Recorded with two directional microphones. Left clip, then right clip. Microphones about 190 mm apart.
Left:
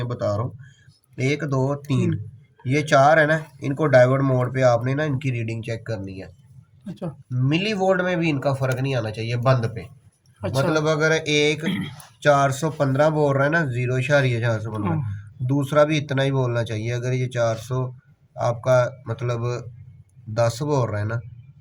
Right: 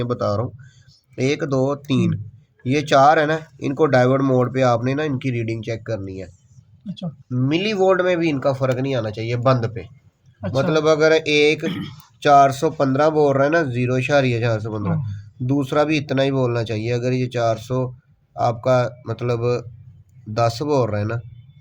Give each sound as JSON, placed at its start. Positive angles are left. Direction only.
{"t": 0.0, "sound": "speech", "side_deg": -45}
{"t": 7.3, "sound": "speech", "side_deg": -35}
{"t": 10.4, "sound": "a man's voice", "side_deg": 50}
{"t": 10.7, "sound": "speech", "side_deg": -40}
{"t": 11.6, "sound": "speech", "side_deg": -20}
{"t": 12.2, "sound": "speech", "side_deg": -45}